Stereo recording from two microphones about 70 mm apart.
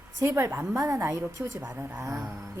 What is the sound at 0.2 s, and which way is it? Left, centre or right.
Speech, right.